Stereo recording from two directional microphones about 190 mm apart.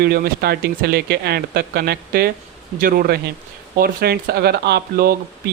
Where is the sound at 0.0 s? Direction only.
55° right (ahead or behind).